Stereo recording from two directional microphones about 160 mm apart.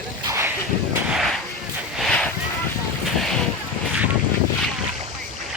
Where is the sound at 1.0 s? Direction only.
Centre (ahead or behind).